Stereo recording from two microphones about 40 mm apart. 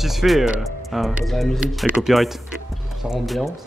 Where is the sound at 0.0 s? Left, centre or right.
Centre.